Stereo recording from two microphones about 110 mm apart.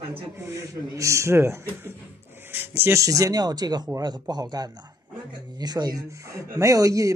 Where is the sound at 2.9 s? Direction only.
30° right (ahead or behind).